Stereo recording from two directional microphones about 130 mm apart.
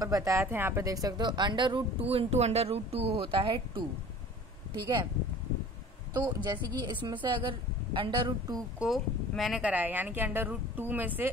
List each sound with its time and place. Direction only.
0.0 s speech: 25° right (ahead or behind)
1.0 s speech: 35° right (ahead or behind)
6.1 s speech: 35° right (ahead or behind)
8.7 s a woman's voice: 5° right (ahead or behind)